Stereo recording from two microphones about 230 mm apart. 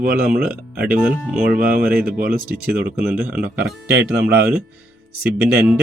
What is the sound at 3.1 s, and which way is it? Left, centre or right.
Speech, centre.